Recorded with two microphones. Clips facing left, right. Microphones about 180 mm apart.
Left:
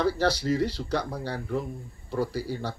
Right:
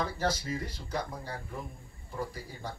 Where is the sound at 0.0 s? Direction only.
75° left (ahead or behind).